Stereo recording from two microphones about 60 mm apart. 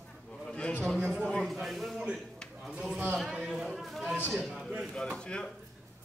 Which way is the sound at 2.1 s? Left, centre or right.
Centre.